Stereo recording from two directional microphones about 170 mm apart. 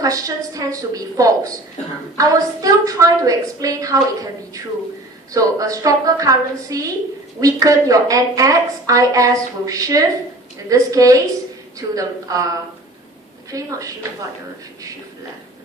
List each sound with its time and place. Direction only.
0.0 s a woman's voice: 20° right (ahead or behind)
5.3 s a woman's voice: 20° right (ahead or behind)